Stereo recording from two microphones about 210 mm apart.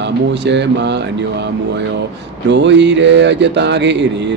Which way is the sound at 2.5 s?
55° right (ahead or behind).